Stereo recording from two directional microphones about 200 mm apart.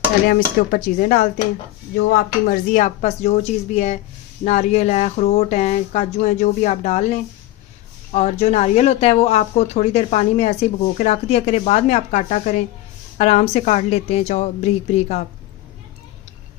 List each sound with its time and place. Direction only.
0.3 s speech: 45° left (ahead or behind)
2.5 s speech: 40° left (ahead or behind)